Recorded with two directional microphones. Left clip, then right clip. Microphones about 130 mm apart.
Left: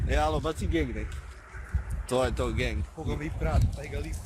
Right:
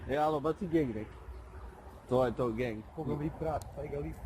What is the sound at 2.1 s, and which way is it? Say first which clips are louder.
Speech: left 2 dB; 30° left (ahead or behind).